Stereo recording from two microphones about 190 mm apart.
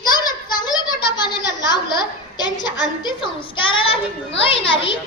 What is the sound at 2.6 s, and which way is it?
A woman's voice, 25° left (ahead or behind).